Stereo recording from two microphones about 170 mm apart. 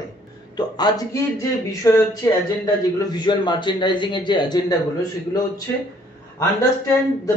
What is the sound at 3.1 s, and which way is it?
A man's voice, 25° left (ahead or behind).